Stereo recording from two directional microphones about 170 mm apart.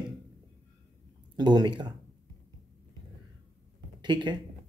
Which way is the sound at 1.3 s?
25° right (ahead or behind).